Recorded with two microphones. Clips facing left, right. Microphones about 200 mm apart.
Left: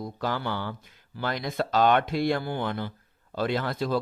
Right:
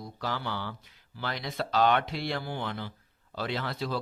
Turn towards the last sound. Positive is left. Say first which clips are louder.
# left 5 dB
turn(degrees=50)  # may be behind; listen again after turning